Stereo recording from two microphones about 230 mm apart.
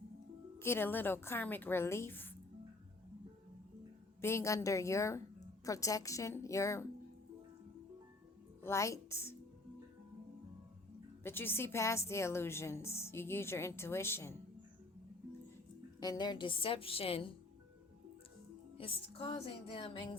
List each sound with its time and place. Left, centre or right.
0.6 s a woman's voice: centre
4.2 s a woman's voice: centre
8.6 s a woman's voice: centre
11.2 s a woman's voice: centre
16.0 s a woman's voice: centre
18.8 s a woman's voice: left